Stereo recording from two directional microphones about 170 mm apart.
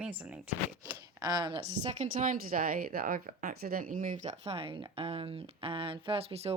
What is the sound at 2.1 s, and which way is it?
Speech, 50° right (ahead or behind).